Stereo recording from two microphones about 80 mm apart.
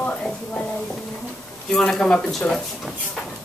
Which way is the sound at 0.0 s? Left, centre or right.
Centre.